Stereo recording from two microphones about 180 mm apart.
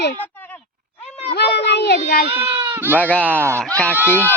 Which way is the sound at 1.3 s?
65° left (ahead or behind).